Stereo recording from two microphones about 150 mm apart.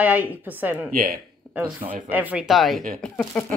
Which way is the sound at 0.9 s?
80° right.